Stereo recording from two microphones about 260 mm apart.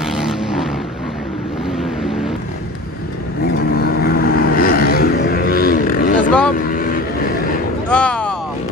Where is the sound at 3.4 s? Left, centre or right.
Left.